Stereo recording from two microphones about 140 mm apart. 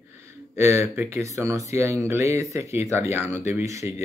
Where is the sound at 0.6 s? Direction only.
20° right (ahead or behind).